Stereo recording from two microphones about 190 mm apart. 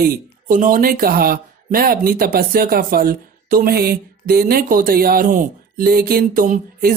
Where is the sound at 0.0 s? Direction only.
50° right (ahead or behind).